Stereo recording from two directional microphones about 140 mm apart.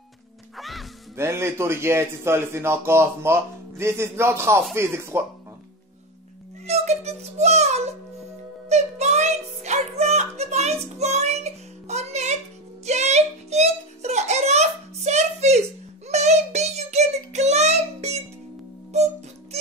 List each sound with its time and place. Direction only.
0.6 s music: centre (ahead or behind)
1.1 s a man's voice: 20° right (ahead or behind)
6.6 s music: 50° right (ahead or behind)
12.8 s a sound: 55° right (ahead or behind)
16.1 s child singing: 50° right (ahead or behind)